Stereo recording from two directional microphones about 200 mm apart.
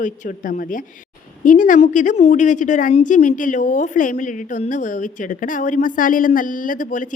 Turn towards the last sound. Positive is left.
turn(degrees=40)  # may be behind; listen again after turning